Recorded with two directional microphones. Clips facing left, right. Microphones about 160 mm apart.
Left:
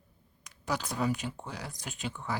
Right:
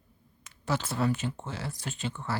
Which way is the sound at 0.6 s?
15° left (ahead or behind).